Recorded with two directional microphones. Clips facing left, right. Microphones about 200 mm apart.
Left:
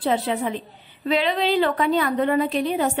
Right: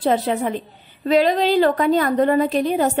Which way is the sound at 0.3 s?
50° right (ahead or behind).